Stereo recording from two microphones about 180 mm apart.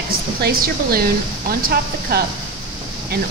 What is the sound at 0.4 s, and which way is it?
Speech, 55° right (ahead or behind).